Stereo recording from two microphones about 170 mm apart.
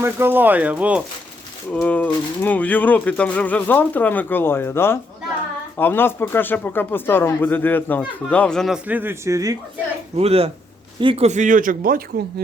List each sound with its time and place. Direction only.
0.0 s speech: 15° right (ahead or behind)
1.7 s speech: 10° left (ahead or behind); by 9.6 s 20° right (ahead or behind)
10.2 s speech: 35° right (ahead or behind); by 12.0 s 55° right (ahead or behind)